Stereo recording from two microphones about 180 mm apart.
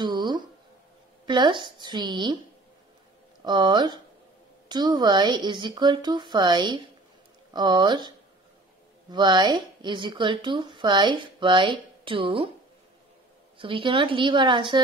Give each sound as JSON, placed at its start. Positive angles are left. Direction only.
{"t": 0.0, "sound": "a sound", "side_deg": -25}
{"t": 1.2, "sound": "a woman's voice", "side_deg": -25}
{"t": 3.4, "sound": "a woman's voice", "side_deg": -25}
{"t": 9.1, "sound": "a woman's voice", "side_deg": -25}
{"t": 13.6, "sound": "a woman's voice", "side_deg": -30}